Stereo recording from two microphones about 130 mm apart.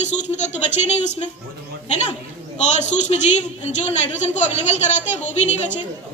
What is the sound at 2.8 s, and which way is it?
A woman's voice, 65° left (ahead or behind).